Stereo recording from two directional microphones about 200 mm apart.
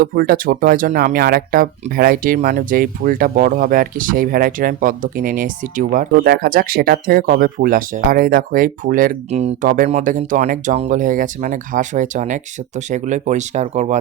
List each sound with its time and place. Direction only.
0.0 s speech: 45° right (ahead or behind)